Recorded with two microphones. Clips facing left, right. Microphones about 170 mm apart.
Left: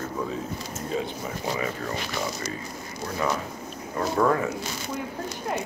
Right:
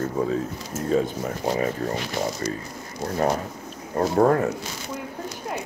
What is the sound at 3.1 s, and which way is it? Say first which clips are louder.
Speech: right 4 dB; 45° right (ahead or behind).